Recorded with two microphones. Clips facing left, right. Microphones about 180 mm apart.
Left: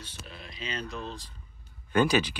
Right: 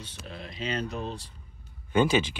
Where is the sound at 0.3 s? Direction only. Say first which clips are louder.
Right 6 dB; 45° right (ahead or behind).